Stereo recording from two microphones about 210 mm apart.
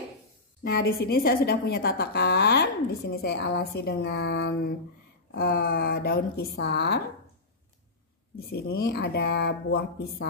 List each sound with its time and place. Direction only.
0.7 s a woman's voice: 45° left (ahead or behind)
8.4 s a woman's voice: 50° left (ahead or behind)